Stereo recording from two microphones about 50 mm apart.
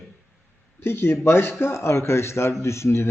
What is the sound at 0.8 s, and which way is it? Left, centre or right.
Speech, left.